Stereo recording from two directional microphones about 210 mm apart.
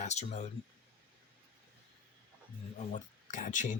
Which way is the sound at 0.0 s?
30° left (ahead or behind).